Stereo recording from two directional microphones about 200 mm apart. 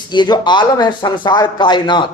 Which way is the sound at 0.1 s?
20° left (ahead or behind).